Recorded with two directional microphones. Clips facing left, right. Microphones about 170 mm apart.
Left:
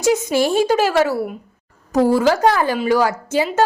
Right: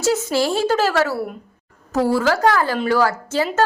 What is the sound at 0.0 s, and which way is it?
Speech, 15° left (ahead or behind).